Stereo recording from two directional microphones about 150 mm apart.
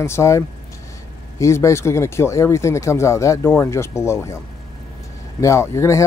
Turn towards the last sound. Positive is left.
turn(degrees=20)  # may be behind; listen again after turning